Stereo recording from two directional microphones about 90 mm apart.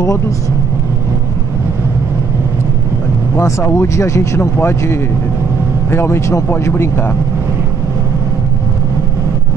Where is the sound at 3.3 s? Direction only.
35° left (ahead or behind).